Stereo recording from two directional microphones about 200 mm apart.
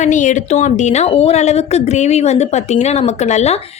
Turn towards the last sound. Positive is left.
turn(degrees=35)  # may be behind; listen again after turning